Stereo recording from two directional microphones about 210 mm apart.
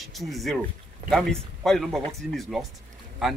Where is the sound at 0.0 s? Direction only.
Centre (ahead or behind).